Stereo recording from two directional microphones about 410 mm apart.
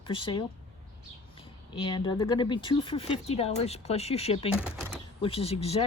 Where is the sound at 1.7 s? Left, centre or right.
Centre.